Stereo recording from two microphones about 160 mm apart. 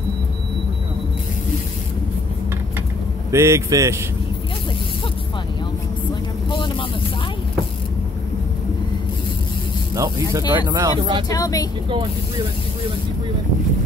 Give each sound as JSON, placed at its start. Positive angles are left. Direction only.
{"t": 3.3, "sound": "speech", "side_deg": -20}
{"t": 9.9, "sound": "speech", "side_deg": -20}
{"t": 11.2, "sound": "speech", "side_deg": 20}